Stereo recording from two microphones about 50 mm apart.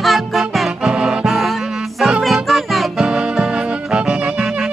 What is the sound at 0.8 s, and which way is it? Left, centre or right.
Music, centre.